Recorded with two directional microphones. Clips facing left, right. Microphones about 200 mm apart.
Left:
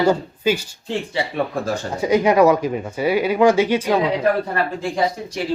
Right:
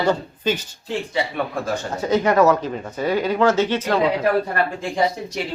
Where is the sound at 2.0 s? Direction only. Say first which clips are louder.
Left 2 dB; 10° left (ahead or behind).